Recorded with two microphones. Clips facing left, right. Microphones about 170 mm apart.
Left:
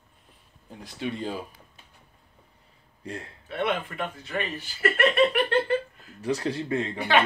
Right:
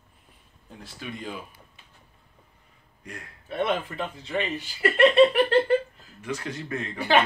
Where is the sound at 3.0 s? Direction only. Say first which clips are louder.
Left 6 dB; 30° left (ahead or behind).